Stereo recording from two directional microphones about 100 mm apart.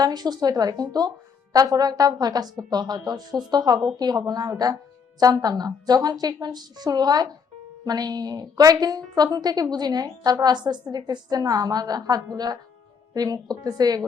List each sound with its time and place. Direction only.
0.0 s a woman's voice: 45° right (ahead or behind)